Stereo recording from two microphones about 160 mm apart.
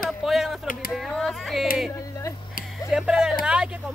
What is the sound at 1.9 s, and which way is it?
Speech, 20° left (ahead or behind).